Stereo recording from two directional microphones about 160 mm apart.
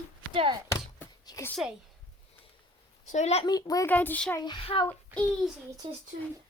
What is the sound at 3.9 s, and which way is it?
Speech, 10° left (ahead or behind).